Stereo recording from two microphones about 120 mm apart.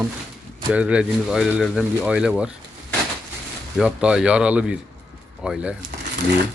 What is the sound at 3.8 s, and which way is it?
Speech, 5° right (ahead or behind).